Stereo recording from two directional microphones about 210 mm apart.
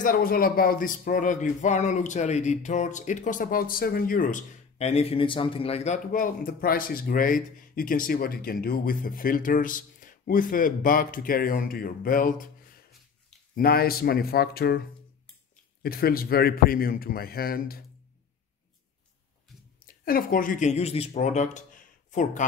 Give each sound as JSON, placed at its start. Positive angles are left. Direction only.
{"t": 0.0, "sound": "a man's voice", "side_deg": 40}
{"t": 15.8, "sound": "a man's voice", "side_deg": 45}
{"t": 20.1, "sound": "speech", "side_deg": 45}